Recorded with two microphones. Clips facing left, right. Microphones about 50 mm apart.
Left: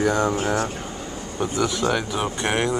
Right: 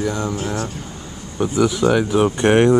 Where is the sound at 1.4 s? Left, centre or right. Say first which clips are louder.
Right 6 dB; centre.